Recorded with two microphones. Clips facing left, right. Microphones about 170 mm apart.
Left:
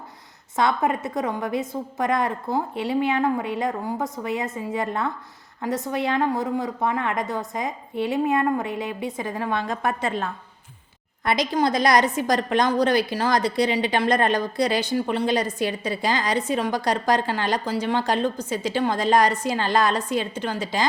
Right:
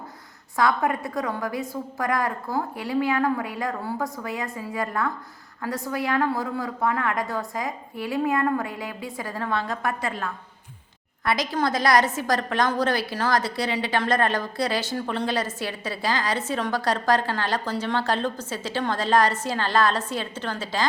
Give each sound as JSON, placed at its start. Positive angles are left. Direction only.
{"t": 0.5, "sound": "a woman's voice", "side_deg": 20}